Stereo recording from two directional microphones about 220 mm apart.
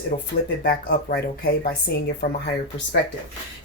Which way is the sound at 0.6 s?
45° left (ahead or behind).